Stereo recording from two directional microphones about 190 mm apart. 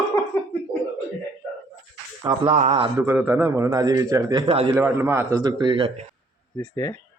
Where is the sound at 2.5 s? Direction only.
35° right (ahead or behind).